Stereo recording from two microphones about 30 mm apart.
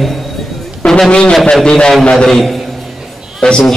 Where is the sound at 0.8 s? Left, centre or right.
Left.